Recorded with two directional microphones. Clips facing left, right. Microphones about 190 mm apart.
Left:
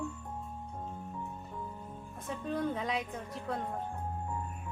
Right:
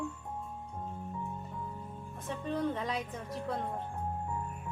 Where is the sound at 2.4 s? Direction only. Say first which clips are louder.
Even; centre (ahead or behind).